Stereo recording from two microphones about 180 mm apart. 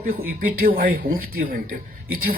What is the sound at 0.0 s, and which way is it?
Speech, 55° right (ahead or behind).